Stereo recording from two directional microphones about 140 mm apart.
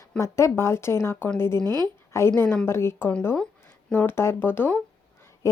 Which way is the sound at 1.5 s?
30° right (ahead or behind).